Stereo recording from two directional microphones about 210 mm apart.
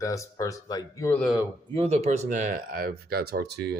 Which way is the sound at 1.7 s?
30° right (ahead or behind).